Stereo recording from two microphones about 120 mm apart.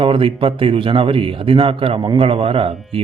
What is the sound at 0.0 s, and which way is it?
Speech, 50° right (ahead or behind).